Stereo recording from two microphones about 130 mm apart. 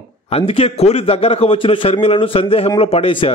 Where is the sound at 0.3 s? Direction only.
50° left (ahead or behind).